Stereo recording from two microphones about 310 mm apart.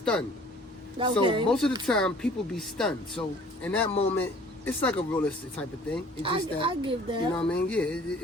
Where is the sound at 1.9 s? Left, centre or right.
Centre.